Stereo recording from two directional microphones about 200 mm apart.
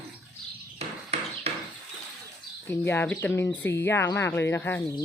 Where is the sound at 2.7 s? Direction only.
10° left (ahead or behind).